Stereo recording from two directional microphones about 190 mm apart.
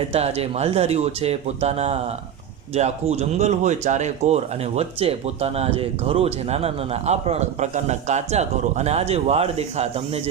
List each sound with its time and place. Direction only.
0.1 s speech: 35° right (ahead or behind)